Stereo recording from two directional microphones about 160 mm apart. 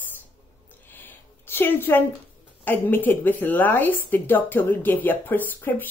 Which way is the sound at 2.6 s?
10° left (ahead or behind).